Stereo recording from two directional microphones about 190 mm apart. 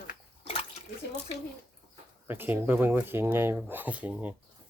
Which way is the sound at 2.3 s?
10° right (ahead or behind).